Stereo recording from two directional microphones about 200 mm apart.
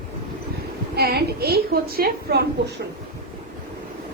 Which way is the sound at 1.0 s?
50° right (ahead or behind).